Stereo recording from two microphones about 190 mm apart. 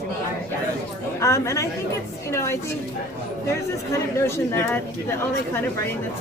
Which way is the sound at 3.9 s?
15° left (ahead or behind).